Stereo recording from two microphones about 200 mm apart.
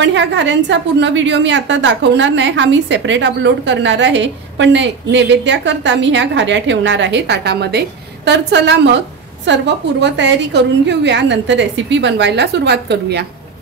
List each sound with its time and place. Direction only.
0.0 s a woman's voice: 65° right (ahead or behind)